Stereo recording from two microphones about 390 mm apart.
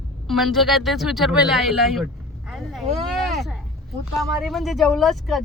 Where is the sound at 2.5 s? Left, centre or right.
Centre.